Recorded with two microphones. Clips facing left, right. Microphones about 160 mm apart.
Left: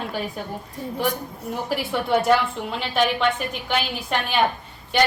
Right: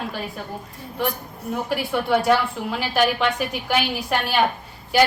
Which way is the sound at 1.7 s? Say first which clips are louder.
Even; centre (ahead or behind).